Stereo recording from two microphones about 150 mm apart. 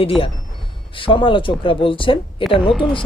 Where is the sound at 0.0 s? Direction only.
40° left (ahead or behind).